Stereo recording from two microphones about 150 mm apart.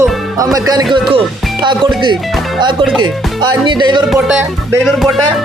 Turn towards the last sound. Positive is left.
turn(degrees=0)  # may be behind; listen again after turning